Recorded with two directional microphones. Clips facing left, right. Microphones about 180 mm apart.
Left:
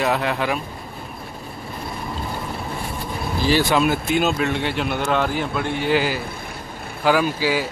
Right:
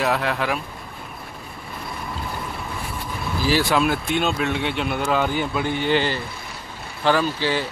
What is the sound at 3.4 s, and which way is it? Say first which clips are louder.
Speech: left 2 dB; centre (ahead or behind).